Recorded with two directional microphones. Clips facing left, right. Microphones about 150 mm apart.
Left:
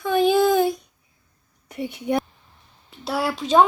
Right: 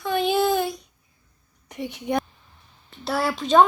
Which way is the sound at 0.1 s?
45° left (ahead or behind).